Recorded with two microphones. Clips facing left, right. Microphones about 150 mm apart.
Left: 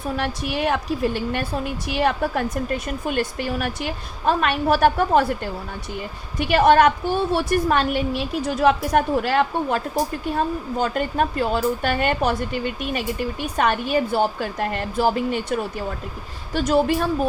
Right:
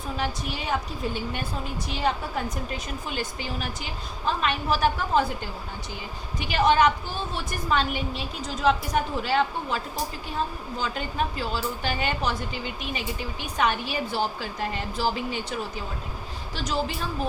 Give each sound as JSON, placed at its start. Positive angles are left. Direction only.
{"t": 0.2, "sound": "a woman's voice", "side_deg": 65}
{"t": 16.6, "sound": "a woman's voice", "side_deg": 55}